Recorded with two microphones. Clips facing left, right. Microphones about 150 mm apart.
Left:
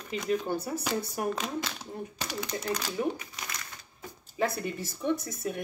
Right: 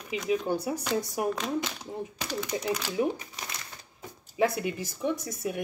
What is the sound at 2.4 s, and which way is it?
Speech, 10° right (ahead or behind).